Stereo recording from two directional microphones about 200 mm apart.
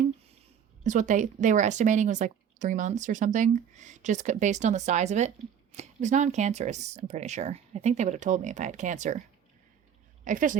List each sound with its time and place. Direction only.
0.9 s speech: 40° right (ahead or behind)
10.2 s speech: 40° right (ahead or behind)